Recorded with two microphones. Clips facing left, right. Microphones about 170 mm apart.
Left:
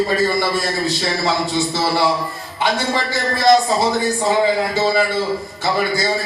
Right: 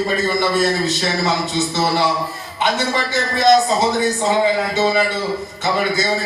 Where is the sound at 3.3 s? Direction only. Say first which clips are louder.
Even; 20° right (ahead or behind).